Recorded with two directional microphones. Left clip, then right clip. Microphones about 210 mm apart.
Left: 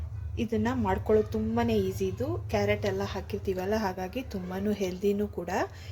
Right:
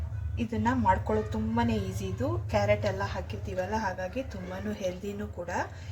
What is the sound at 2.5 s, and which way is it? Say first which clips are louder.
A woman's voice: right 1 dB; 45° left (ahead or behind).